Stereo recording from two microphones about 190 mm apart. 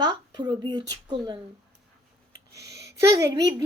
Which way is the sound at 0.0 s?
20° right (ahead or behind).